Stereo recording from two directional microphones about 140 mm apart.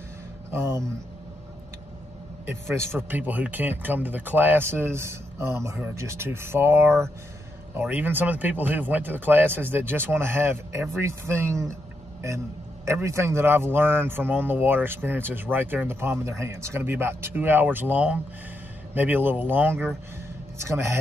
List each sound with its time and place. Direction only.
0.5 s speech: 20° right (ahead or behind)
2.7 s speech: 15° right (ahead or behind)
12.8 s speech: 20° right (ahead or behind)